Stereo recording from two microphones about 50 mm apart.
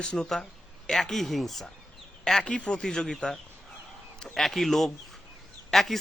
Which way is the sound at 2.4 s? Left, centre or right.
Left.